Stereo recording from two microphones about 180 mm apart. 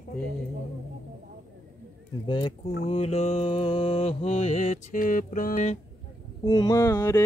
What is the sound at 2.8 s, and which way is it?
Mantra, 35° left (ahead or behind).